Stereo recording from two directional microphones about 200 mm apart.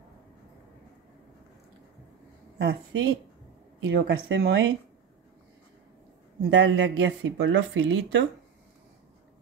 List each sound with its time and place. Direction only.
2.6 s speech: 60° right (ahead or behind)
6.5 s speech: 65° right (ahead or behind)